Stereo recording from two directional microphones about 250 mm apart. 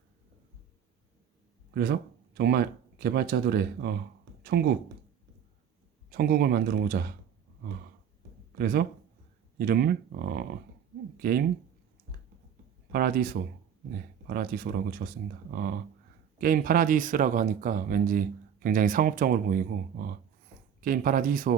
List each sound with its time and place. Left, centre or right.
1.7 s speech: right
6.1 s speech: right
8.5 s speech: right
12.9 s speech: right
16.4 s speech: right